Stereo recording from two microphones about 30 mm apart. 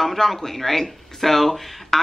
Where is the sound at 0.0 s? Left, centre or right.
Centre.